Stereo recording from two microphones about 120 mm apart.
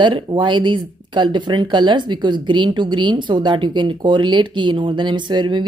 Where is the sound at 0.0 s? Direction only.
40° right (ahead or behind).